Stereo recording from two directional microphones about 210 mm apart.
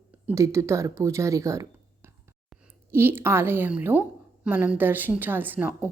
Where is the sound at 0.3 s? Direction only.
15° right (ahead or behind).